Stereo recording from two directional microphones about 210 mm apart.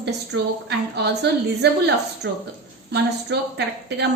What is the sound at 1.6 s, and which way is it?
Speech, 50° right (ahead or behind).